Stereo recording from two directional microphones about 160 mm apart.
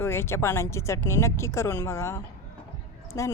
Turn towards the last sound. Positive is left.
turn(degrees=20)  # may be behind; listen again after turning